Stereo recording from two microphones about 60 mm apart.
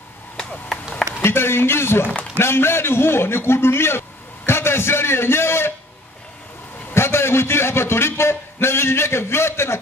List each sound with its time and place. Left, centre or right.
1.2 s a man's voice: left
6.9 s a man's voice: left